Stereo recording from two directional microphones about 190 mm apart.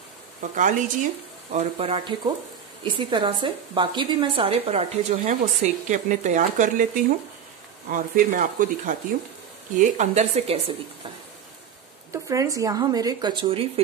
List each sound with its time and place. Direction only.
0.4 s a woman's voice: 40° right (ahead or behind)
12.1 s a woman's voice: 15° right (ahead or behind)